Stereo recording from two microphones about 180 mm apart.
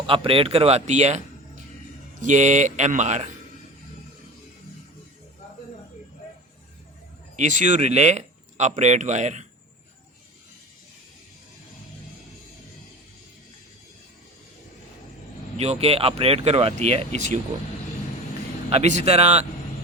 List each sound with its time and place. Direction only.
0.0 s speech: 30° right (ahead or behind)
7.3 s speech: 45° right (ahead or behind)
15.5 s speech: 35° right (ahead or behind)
18.7 s speech: 40° right (ahead or behind)